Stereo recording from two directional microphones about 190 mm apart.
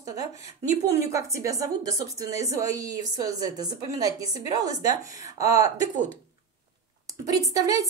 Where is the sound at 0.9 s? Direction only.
15° right (ahead or behind).